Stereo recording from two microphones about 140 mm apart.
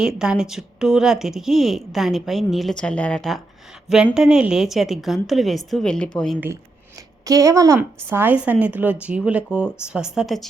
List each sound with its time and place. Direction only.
0.0 s a woman's voice: 5° right (ahead or behind)
7.3 s a woman's voice: 25° right (ahead or behind); by 10.5 s centre (ahead or behind)